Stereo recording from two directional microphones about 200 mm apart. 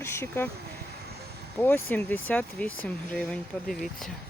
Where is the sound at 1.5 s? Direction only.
10° left (ahead or behind).